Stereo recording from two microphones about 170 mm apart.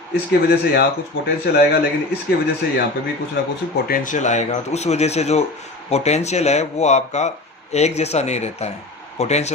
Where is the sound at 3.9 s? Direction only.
50° left (ahead or behind).